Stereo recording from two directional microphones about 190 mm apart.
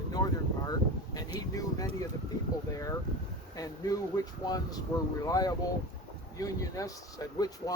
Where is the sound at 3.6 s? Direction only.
20° left (ahead or behind).